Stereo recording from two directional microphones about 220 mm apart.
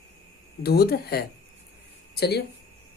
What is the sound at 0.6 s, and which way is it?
Speech, 45° left (ahead or behind).